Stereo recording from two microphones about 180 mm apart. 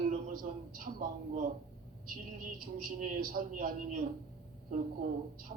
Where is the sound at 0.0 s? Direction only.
50° right (ahead or behind).